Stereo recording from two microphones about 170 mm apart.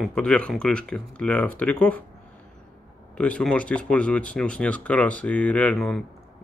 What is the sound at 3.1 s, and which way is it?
Speech, 5° left (ahead or behind).